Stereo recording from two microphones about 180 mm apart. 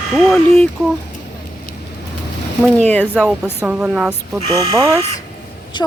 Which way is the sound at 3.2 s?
15° left (ahead or behind).